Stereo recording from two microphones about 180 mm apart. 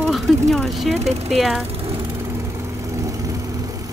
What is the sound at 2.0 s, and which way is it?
Vehicle, 15° right (ahead or behind).